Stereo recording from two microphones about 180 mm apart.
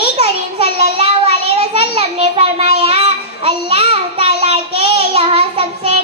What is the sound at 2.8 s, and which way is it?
Child singing, 30° right (ahead or behind).